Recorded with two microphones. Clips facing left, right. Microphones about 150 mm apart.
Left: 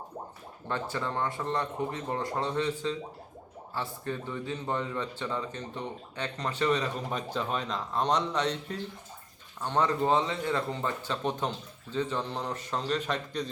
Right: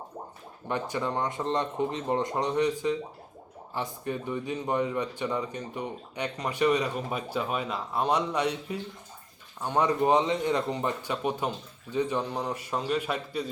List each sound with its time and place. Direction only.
0.7 s speech: 15° right (ahead or behind)